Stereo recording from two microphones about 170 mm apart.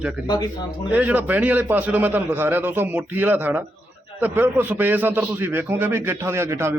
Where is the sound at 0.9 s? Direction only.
10° right (ahead or behind).